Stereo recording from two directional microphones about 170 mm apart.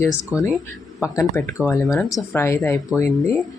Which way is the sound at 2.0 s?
Centre (ahead or behind).